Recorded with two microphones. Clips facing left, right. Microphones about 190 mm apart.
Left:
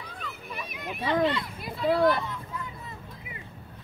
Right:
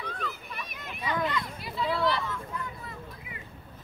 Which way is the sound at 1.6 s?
45° left (ahead or behind).